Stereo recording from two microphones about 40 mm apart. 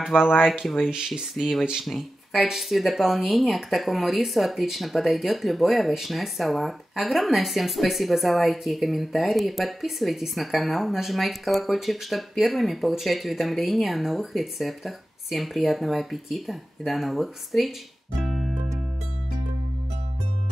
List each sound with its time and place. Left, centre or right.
0.4 s speech: centre
1.3 s speech: centre
18.2 s music: centre